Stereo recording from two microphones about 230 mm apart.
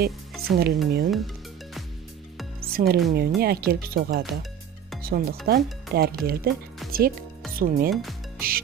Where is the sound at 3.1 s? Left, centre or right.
Right.